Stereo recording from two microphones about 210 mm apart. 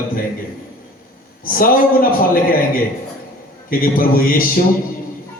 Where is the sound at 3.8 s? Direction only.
40° left (ahead or behind).